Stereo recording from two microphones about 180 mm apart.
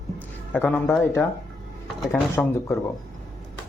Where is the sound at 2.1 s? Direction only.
15° left (ahead or behind).